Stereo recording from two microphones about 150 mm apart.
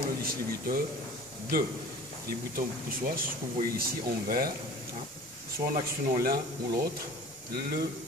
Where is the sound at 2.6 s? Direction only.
70° right (ahead or behind).